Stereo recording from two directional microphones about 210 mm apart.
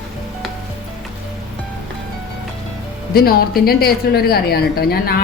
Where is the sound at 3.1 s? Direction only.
45° left (ahead or behind).